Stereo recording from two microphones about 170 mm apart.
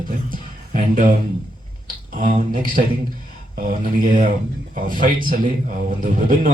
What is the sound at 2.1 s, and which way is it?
Music, 50° right (ahead or behind).